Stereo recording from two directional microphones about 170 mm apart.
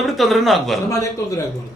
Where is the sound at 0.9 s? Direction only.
20° left (ahead or behind).